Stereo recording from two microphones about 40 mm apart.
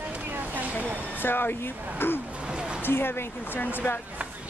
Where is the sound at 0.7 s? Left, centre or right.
Left.